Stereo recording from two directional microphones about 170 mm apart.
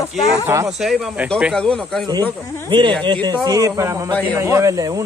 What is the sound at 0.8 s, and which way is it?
Speech, 5° right (ahead or behind).